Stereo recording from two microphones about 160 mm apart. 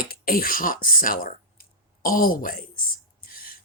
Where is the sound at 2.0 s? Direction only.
60° left (ahead or behind).